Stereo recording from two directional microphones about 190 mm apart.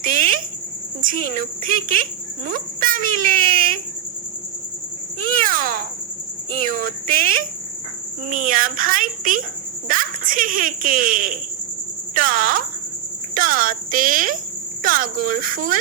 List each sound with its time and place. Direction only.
0.0 s cricket: 45° right (ahead or behind)
1.0 s speech: 45° right (ahead or behind)
5.2 s babbling: 45° right (ahead or behind)
6.7 s speech: 45° right (ahead or behind)